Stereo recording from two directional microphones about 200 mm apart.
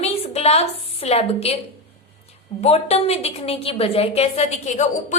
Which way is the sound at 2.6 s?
30° left (ahead or behind).